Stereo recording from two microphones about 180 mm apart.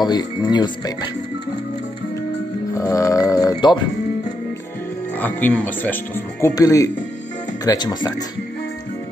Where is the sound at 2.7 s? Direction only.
20° left (ahead or behind).